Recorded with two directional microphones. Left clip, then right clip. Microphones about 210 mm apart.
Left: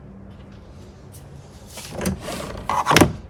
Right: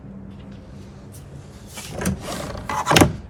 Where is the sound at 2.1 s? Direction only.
Centre (ahead or behind).